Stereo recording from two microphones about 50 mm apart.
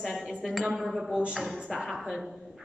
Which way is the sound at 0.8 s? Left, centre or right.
Centre.